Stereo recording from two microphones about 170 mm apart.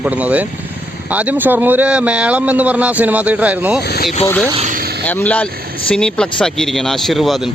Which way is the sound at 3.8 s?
70° left (ahead or behind).